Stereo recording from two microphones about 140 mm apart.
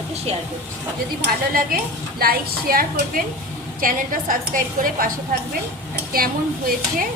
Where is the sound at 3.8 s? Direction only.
75° right (ahead or behind).